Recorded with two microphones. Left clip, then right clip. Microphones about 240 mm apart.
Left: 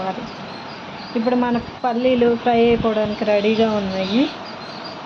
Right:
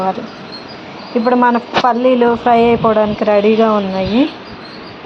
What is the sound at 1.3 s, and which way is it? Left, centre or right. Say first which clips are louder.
Speech: right 9 dB; centre.